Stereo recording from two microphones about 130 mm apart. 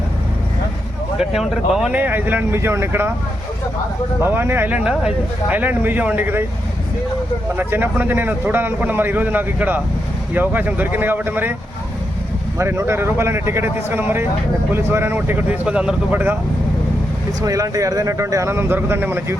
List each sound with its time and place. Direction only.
1.2 s speech: centre (ahead or behind)
2.0 s a man's voice: 15° right (ahead or behind)
4.2 s a man's voice: 20° right (ahead or behind)
7.5 s a man's voice: 15° right (ahead or behind)
12.5 s a man's voice: 20° right (ahead or behind)
17.4 s speech: 25° right (ahead or behind)